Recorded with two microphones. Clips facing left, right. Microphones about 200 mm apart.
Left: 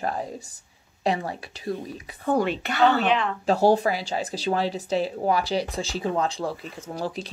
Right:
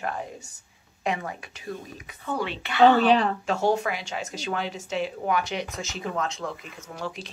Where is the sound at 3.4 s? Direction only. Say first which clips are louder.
Left 5 dB; 35° left (ahead or behind).